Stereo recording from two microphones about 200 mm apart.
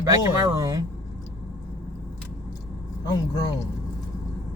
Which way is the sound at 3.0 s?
20° left (ahead or behind).